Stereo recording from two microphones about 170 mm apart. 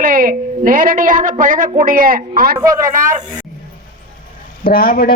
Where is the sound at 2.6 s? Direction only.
20° right (ahead or behind).